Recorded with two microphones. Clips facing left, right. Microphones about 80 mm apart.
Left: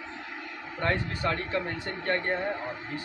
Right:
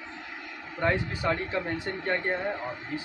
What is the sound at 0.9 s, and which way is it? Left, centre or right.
Speech, centre.